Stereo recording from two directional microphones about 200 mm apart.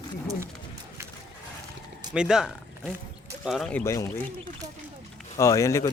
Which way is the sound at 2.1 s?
5° right (ahead or behind).